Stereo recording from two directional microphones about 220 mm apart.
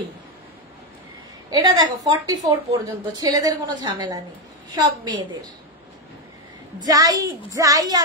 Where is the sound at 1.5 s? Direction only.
20° right (ahead or behind).